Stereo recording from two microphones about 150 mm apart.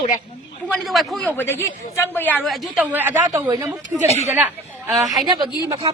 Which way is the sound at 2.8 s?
10° right (ahead or behind).